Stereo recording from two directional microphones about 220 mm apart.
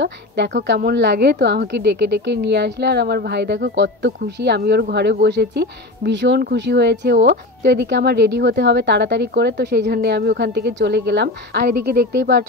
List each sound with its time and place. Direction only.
0.0 s a woman's voice: 50° right (ahead or behind)